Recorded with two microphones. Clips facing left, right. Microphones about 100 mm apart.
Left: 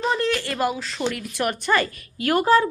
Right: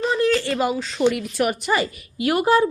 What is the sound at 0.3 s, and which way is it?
A woman's voice, centre (ahead or behind).